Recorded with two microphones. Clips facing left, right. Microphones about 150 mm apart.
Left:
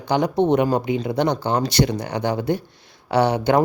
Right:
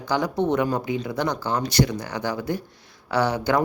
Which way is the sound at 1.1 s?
65° left (ahead or behind).